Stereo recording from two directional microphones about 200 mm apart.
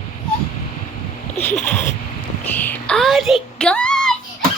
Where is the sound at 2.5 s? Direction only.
10° left (ahead or behind).